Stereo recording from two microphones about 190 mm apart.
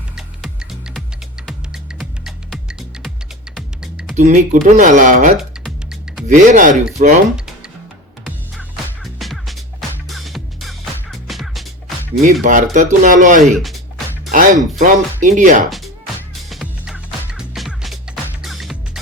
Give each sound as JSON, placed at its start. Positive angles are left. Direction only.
{"t": 0.2, "sound": "music", "side_deg": -5}
{"t": 4.1, "sound": "speech", "side_deg": -40}
{"t": 5.4, "sound": "music", "side_deg": -5}
{"t": 6.2, "sound": "speech", "side_deg": -40}
{"t": 7.3, "sound": "music", "side_deg": -5}
{"t": 9.1, "sound": "music", "side_deg": 0}
{"t": 12.2, "sound": "speech", "side_deg": -45}
{"t": 13.4, "sound": "speech", "side_deg": 0}
{"t": 14.3, "sound": "speech", "side_deg": -40}
{"t": 16.3, "sound": "music", "side_deg": 0}